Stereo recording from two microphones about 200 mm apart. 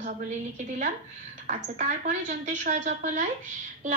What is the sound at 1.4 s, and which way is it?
A woman's voice, 35° right (ahead or behind).